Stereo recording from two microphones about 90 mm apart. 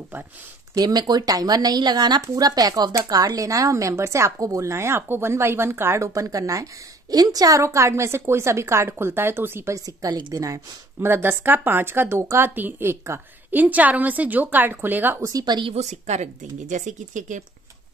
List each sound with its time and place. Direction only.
0.7 s speech: 50° right (ahead or behind); by 9.8 s 25° right (ahead or behind)
9.8 s speech: 40° right (ahead or behind)
11.0 s a woman's voice: 25° right (ahead or behind)
13.6 s a woman's voice: 20° right (ahead or behind)
15.2 s speech: 45° right (ahead or behind)